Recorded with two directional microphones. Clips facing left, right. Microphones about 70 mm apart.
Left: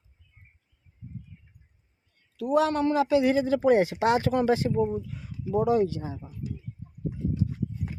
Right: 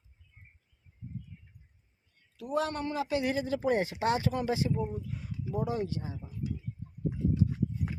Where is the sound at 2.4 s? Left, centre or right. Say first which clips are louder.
Left 8 dB; left.